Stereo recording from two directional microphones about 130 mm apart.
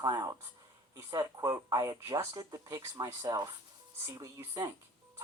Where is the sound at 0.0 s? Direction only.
30° right (ahead or behind).